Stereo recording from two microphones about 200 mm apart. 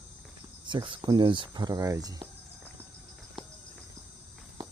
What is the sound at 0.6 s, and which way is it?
Speech, 25° right (ahead or behind).